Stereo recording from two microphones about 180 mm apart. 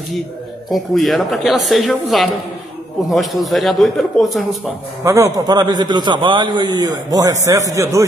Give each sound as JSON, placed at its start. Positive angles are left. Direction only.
{"t": 0.7, "sound": "speech", "side_deg": 0}
{"t": 5.0, "sound": "a man's voice", "side_deg": -15}